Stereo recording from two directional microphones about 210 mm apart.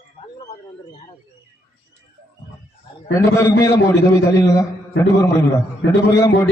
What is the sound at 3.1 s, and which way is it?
A man's voice, 15° left (ahead or behind).